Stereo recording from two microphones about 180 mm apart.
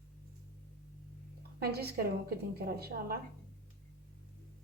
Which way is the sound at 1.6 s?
60° right (ahead or behind).